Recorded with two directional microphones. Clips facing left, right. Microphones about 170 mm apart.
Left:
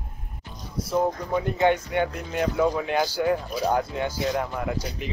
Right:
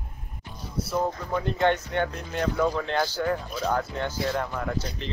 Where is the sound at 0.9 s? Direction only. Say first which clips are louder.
Left 4 dB; 10° left (ahead or behind).